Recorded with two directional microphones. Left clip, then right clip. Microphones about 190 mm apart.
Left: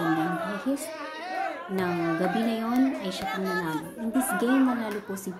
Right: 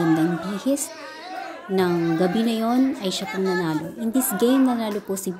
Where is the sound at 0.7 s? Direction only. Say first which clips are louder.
Right 5 dB; 50° right (ahead or behind).